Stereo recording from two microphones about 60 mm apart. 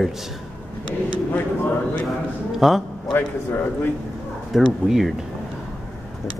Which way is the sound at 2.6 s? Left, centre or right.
Centre.